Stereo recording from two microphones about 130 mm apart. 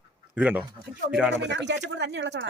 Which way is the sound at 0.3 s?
10° right (ahead or behind).